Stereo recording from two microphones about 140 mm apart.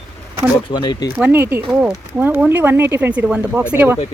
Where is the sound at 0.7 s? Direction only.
30° left (ahead or behind).